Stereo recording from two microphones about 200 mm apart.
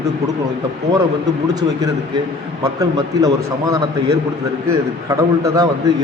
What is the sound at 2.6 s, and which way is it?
A man's voice, 20° right (ahead or behind).